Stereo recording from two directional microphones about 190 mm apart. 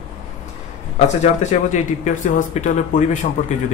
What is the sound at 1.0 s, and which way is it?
Speech, 40° left (ahead or behind).